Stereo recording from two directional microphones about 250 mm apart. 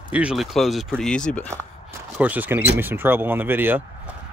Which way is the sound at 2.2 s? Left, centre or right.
Centre.